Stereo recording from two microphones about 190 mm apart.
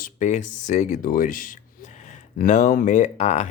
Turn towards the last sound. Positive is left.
turn(degrees=35)  # may be behind; listen again after turning